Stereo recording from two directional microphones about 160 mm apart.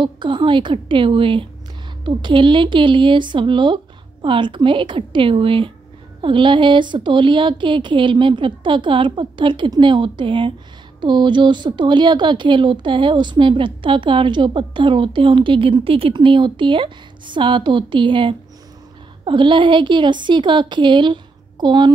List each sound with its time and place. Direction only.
0.0 s a woman's voice: 30° right (ahead or behind)